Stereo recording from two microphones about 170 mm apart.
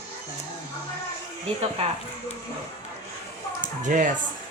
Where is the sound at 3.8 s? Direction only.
50° right (ahead or behind).